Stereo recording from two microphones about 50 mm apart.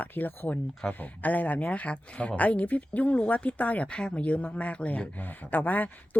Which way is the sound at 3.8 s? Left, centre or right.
Centre.